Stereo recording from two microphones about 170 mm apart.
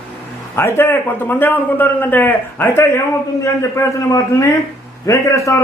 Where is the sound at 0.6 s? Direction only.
15° left (ahead or behind).